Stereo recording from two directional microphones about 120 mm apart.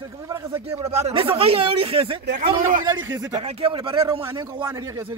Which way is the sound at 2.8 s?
35° right (ahead or behind).